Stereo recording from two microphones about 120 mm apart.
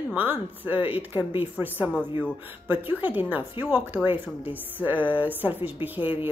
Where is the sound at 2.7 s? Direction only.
15° right (ahead or behind).